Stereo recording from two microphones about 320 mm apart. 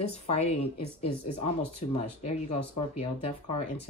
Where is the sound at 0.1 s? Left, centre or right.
Centre.